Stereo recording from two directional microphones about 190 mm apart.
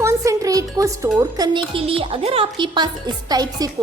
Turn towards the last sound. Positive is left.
turn(degrees=-20)  # may be behind; listen again after turning